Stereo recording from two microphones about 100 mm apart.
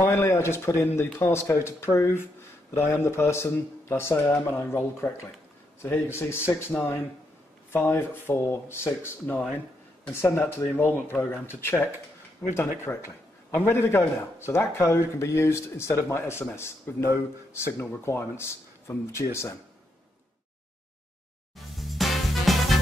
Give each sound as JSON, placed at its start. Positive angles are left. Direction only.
{"t": 0.0, "sound": "a man's voice", "side_deg": 20}
{"t": 7.7, "sound": "a man's voice", "side_deg": 25}
{"t": 21.5, "sound": "music", "side_deg": 0}